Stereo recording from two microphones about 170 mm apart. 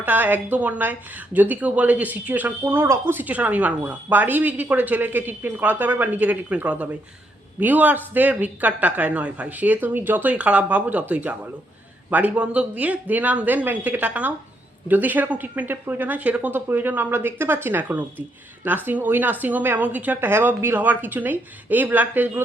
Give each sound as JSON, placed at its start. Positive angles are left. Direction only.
{"t": 0.0, "sound": "a woman's voice", "side_deg": -10}